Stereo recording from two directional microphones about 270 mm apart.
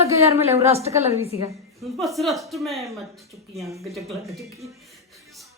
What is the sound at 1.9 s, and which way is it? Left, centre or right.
Speech, centre.